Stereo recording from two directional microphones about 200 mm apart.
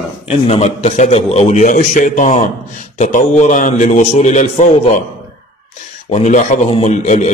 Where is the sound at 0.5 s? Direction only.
35° left (ahead or behind).